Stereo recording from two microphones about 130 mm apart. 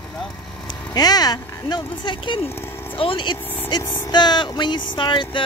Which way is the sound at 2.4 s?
15° left (ahead or behind).